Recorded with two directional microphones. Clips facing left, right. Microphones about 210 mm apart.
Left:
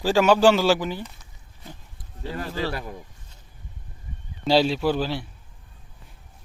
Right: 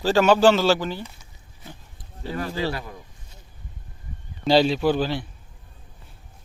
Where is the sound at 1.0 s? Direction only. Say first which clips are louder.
Even; centre (ahead or behind).